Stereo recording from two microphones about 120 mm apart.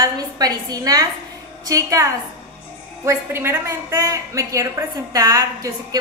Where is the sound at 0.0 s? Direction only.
30° right (ahead or behind).